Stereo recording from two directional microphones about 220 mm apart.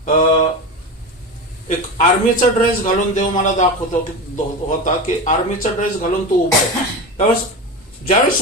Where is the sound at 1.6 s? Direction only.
35° left (ahead or behind).